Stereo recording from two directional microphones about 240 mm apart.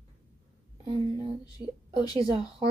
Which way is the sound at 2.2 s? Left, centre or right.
Right.